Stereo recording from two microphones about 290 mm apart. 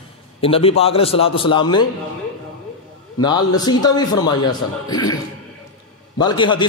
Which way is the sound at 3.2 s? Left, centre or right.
Centre.